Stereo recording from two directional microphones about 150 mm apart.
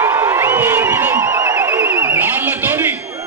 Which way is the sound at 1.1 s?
25° right (ahead or behind).